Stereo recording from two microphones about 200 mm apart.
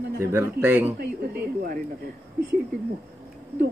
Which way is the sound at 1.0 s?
50° right (ahead or behind).